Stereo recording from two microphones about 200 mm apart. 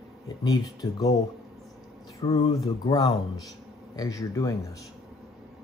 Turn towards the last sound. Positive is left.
turn(degrees=15)  # may be behind; listen again after turning